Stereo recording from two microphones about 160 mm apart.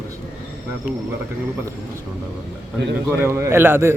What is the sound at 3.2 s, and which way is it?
Speech, 15° right (ahead or behind).